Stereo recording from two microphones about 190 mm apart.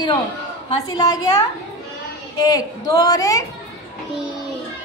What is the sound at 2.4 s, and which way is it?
A woman's voice, 20° left (ahead or behind).